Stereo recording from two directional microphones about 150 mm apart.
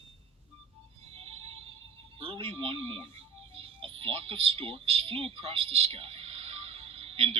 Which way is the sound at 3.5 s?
40° right (ahead or behind).